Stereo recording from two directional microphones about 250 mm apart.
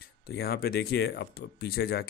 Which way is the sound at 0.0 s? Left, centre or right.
Left.